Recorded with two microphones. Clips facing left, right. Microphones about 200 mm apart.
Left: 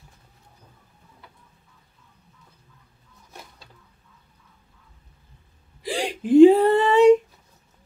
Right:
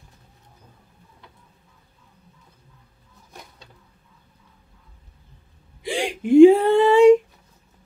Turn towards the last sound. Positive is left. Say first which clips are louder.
# right 2 dB
turn(degrees=0)  # may be behind; listen again after turning